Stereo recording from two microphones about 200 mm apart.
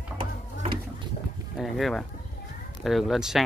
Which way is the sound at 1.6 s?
Centre (ahead or behind).